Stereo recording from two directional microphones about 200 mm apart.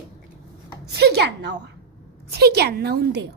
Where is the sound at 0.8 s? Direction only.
55° right (ahead or behind).